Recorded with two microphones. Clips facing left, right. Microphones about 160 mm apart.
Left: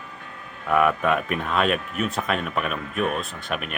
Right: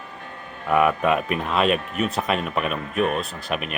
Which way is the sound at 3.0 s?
35° right (ahead or behind).